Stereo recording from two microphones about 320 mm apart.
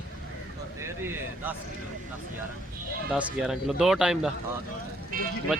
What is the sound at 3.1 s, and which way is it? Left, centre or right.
Speech, centre.